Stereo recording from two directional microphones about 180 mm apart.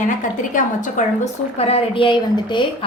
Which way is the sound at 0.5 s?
45° left (ahead or behind).